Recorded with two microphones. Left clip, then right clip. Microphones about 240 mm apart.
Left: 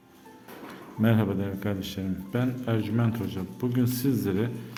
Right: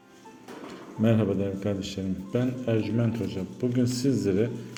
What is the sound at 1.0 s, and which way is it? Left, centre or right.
A man's voice, centre.